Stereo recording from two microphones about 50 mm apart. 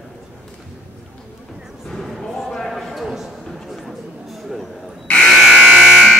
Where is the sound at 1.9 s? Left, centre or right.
Centre.